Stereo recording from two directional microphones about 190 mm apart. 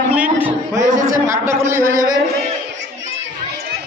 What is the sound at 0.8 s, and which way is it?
Speech, 40° right (ahead or behind).